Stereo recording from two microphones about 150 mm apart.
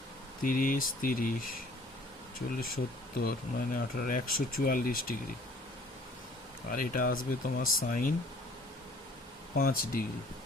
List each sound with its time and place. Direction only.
0.4 s speech: 65° left (ahead or behind)
6.7 s speech: 70° left (ahead or behind)
9.6 s speech: 80° left